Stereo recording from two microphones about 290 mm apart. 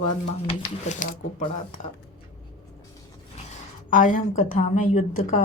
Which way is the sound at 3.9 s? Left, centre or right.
Left.